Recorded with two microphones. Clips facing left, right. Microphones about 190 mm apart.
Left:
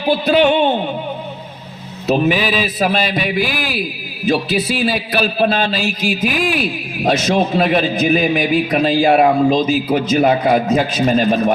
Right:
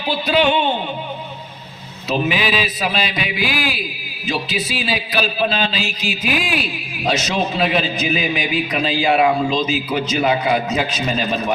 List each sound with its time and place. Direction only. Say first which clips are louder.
0.0 s a man's voice: left 4 dB; 50° left (ahead or behind)
2.2 s a man's voice: left 4 dB; 45° left (ahead or behind)